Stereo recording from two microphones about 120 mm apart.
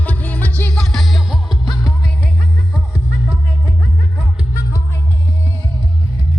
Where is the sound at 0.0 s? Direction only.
10° left (ahead or behind).